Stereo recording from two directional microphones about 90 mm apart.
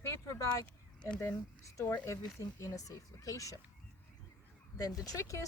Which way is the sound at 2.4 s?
40° left (ahead or behind).